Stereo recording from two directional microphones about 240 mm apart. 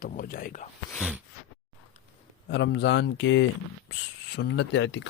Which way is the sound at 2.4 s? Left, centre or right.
Left.